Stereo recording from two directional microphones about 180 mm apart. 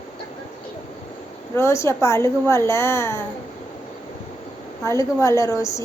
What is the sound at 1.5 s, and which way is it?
A child's voice, 15° left (ahead or behind).